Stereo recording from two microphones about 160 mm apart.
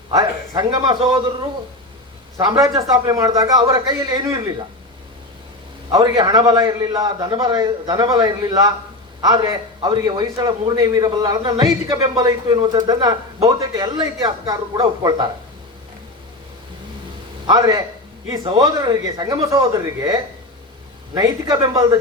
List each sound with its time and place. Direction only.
0.1 s a man's voice: 25° right (ahead or behind)
2.4 s a man's voice: 25° right (ahead or behind)
5.9 s a man's voice: 25° right (ahead or behind)
17.4 s a man's voice: 25° right (ahead or behind)